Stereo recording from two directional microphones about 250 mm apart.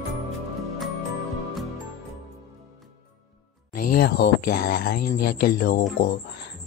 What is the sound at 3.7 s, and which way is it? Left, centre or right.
Music, left.